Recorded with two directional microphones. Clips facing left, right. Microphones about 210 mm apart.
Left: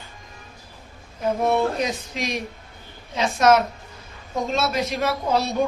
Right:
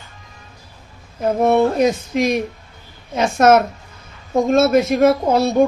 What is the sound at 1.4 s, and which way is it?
Speech, 50° right (ahead or behind).